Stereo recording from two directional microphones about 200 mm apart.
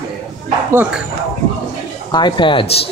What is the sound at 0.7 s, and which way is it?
Speech, 10° right (ahead or behind).